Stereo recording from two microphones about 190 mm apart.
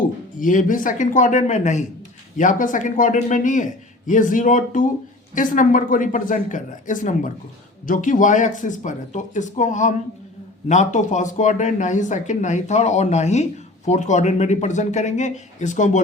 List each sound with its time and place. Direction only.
0.3 s a man's voice: 45° left (ahead or behind)